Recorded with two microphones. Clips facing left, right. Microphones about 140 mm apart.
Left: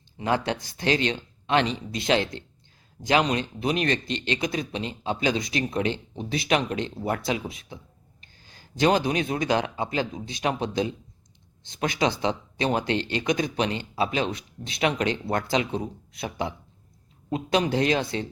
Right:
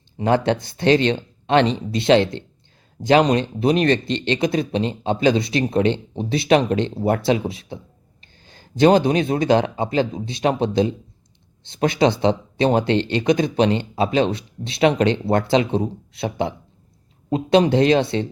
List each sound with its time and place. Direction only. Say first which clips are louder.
0.2 s speech: right 7 dB; 30° right (ahead or behind)